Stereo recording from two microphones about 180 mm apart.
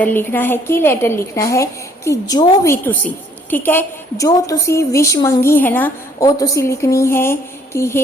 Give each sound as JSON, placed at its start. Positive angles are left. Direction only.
{"t": 0.0, "sound": "a woman's voice", "side_deg": 10}